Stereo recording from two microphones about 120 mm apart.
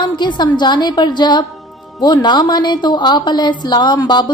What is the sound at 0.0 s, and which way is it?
A woman's voice, 40° left (ahead or behind).